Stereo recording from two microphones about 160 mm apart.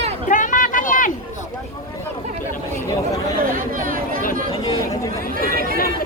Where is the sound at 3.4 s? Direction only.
60° right (ahead or behind).